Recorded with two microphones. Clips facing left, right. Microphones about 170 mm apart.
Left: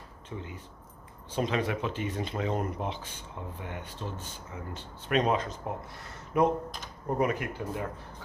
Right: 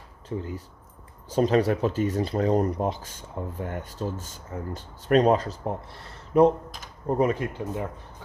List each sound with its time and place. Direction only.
0.3 s speech: 40° right (ahead or behind)